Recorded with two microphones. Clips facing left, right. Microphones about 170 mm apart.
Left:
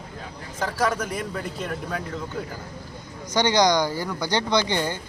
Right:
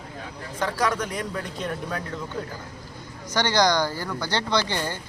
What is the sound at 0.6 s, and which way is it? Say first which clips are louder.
A man's voice: left 1 dB; 5° left (ahead or behind).